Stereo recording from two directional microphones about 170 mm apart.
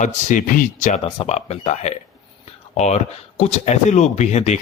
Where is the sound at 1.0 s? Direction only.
35° left (ahead or behind).